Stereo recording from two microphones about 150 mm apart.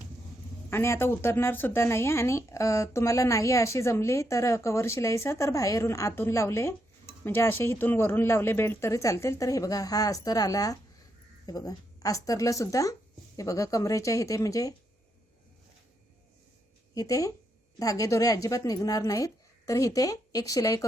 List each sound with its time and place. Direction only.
0.7 s speech: 15° left (ahead or behind)
16.9 s speech: 25° left (ahead or behind)